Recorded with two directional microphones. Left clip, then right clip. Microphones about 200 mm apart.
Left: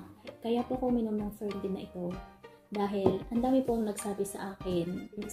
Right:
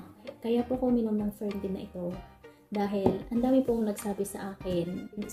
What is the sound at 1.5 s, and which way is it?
A woman's voice, centre (ahead or behind).